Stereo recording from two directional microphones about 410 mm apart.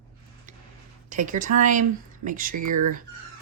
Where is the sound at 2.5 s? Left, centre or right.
Right.